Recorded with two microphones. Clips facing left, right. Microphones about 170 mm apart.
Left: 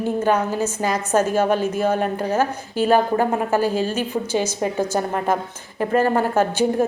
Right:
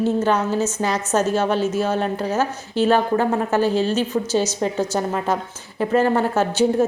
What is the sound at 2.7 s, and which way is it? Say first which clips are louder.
A woman's voice: even; 10° left (ahead or behind).